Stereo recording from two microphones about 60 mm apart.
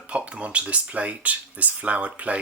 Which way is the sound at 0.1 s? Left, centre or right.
Right.